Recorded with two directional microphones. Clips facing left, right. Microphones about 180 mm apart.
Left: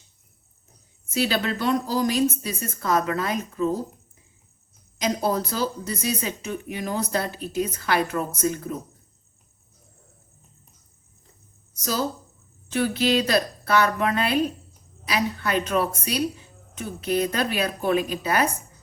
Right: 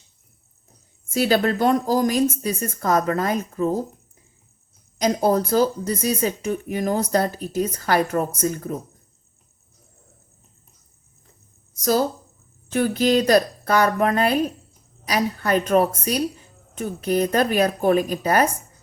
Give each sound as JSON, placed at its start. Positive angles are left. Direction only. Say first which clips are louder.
{"t": 1.1, "sound": "speech", "louder": "right 5 dB", "side_deg": -45}
{"t": 4.9, "sound": "speech", "louder": "right 5 dB", "side_deg": -45}
{"t": 12.7, "sound": "speech", "louder": "right 3 dB", "side_deg": -45}